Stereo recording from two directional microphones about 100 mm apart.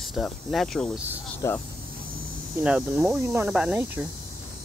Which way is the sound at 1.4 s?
30° left (ahead or behind).